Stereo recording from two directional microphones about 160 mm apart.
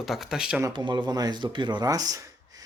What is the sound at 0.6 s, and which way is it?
A man's voice, 30° right (ahead or behind).